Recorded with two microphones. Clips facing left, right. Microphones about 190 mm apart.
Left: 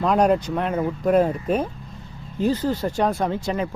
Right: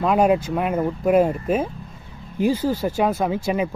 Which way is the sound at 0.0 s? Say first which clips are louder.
Right 1 dB; 5° right (ahead or behind).